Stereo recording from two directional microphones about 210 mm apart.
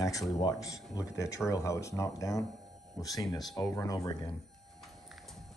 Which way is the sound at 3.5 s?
15° left (ahead or behind).